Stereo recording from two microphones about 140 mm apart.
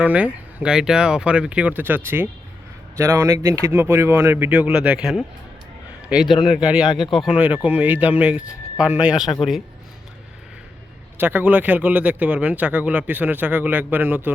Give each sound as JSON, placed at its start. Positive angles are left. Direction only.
{"t": 0.0, "sound": "a man's voice", "side_deg": -10}
{"t": 11.2, "sound": "speech", "side_deg": -15}